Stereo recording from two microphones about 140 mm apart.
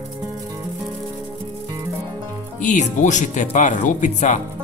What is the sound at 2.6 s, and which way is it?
Speech, 60° left (ahead or behind).